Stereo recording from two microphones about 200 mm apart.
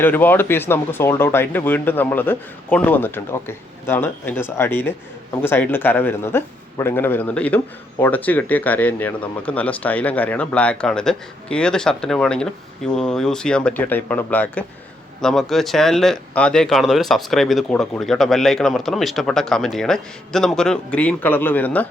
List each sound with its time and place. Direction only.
0.0 s speech: 10° left (ahead or behind)